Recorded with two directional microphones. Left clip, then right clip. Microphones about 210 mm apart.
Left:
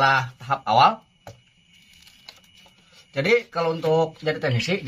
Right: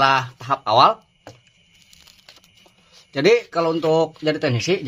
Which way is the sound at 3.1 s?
55° right (ahead or behind).